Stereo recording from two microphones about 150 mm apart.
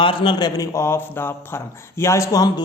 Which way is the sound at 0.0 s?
35° left (ahead or behind).